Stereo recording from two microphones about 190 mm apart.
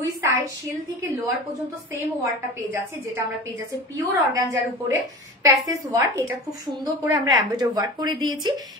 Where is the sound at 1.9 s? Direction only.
15° right (ahead or behind).